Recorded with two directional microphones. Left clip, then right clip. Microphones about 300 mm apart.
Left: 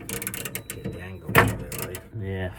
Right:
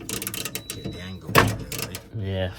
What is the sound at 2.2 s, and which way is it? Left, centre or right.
Mechanisms, right.